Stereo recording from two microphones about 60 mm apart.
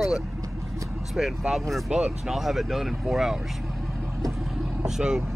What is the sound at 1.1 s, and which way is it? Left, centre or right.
Speech, centre.